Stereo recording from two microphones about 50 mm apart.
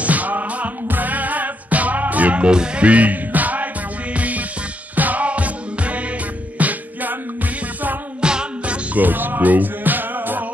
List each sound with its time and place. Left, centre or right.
0.0 s music: right
8.2 s music: centre
8.9 s music: right